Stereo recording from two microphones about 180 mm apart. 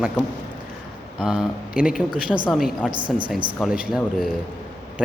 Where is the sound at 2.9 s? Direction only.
25° right (ahead or behind).